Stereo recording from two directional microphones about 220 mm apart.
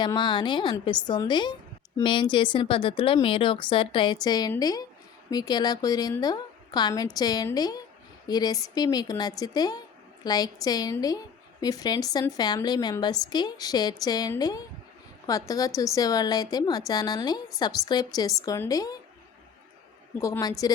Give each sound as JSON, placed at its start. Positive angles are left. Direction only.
{"t": 0.0, "sound": "a woman's voice", "side_deg": 20}
{"t": 20.1, "sound": "a woman's voice", "side_deg": 15}